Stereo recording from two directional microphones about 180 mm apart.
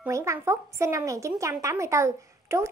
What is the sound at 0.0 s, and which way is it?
A woman's voice, 15° right (ahead or behind).